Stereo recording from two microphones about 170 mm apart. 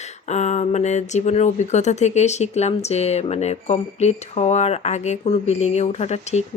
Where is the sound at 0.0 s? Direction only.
40° left (ahead or behind).